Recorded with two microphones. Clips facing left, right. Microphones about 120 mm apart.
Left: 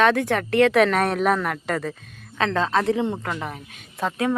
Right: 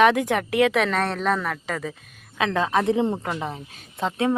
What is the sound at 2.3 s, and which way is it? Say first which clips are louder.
Speech: even; 10° right (ahead or behind).